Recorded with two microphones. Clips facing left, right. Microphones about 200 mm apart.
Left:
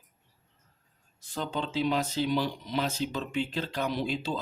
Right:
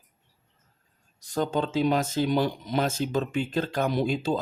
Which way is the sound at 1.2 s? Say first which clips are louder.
Right 7 dB; 45° right (ahead or behind).